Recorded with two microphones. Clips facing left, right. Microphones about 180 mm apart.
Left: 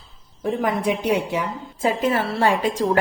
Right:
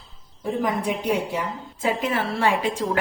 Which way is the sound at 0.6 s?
70° left (ahead or behind).